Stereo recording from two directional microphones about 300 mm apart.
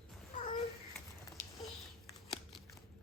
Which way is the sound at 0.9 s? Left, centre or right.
Centre.